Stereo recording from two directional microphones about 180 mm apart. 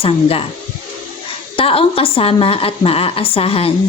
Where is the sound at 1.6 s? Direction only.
30° left (ahead or behind).